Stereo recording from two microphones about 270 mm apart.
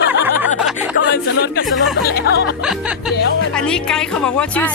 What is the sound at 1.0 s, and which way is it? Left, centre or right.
Speech, left.